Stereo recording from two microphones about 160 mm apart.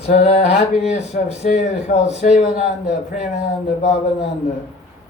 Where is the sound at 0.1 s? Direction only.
45° left (ahead or behind).